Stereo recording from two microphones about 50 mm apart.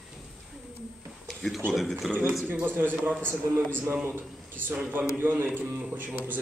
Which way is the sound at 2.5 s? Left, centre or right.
Right.